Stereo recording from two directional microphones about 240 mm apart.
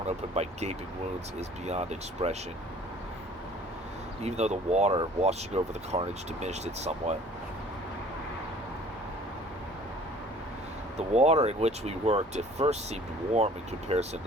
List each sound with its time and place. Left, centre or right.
0.3 s speech: right
4.2 s speech: right
10.9 s speech: right